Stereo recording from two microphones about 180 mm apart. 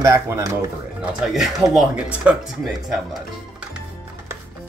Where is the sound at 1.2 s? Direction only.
Centre (ahead or behind).